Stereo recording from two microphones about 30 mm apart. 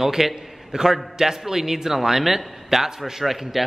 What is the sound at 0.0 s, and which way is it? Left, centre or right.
A man's voice, centre.